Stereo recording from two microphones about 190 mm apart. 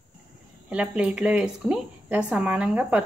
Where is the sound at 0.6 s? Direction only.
5° right (ahead or behind).